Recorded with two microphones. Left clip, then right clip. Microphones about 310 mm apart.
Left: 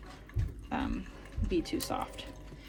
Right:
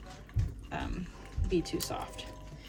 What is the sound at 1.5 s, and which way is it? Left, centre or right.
Speech, centre.